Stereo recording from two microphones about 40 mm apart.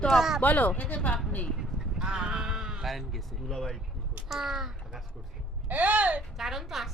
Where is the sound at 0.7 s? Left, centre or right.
Left.